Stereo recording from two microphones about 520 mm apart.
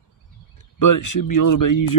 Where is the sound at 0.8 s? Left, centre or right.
Left.